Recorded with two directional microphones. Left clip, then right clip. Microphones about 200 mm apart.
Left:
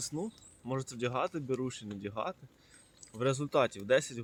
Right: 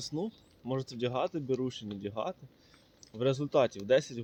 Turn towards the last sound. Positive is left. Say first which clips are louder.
# right 2 dB
turn(degrees=5)  # may be behind; listen again after turning